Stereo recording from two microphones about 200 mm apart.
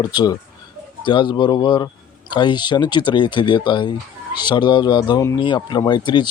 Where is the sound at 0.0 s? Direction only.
20° left (ahead or behind).